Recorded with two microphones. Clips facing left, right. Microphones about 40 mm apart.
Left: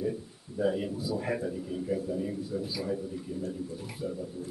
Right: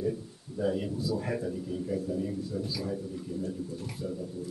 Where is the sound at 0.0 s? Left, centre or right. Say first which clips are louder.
Right 1 dB; centre.